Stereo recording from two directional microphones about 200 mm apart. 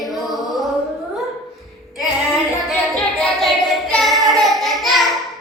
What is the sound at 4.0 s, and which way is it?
Child singing, centre (ahead or behind).